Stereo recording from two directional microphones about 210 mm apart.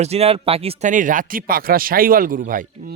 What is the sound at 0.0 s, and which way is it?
Speech, 30° right (ahead or behind).